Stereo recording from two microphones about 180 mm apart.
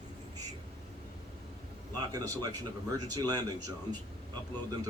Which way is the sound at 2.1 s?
20° right (ahead or behind).